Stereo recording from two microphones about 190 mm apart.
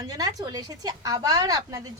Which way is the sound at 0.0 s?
20° right (ahead or behind).